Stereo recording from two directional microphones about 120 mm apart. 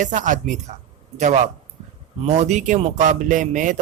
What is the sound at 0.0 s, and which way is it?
A man's voice, 90° right.